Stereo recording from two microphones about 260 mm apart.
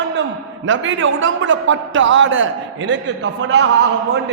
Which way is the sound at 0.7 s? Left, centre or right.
Right.